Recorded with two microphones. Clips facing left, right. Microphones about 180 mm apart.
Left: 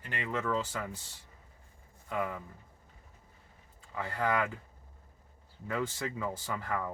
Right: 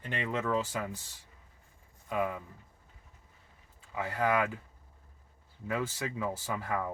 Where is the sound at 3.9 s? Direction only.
10° right (ahead or behind).